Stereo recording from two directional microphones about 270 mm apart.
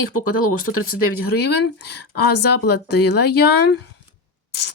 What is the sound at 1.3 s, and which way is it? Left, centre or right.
Speech, left.